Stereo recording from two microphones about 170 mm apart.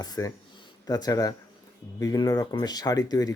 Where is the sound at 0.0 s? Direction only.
20° left (ahead or behind).